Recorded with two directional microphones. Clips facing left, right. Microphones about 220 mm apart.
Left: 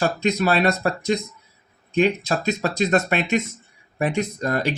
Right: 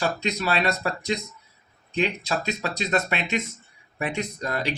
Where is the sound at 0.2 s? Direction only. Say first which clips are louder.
Left 6 dB; 50° left (ahead or behind).